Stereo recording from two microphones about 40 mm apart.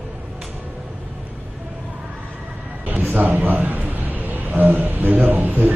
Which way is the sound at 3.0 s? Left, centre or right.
Right.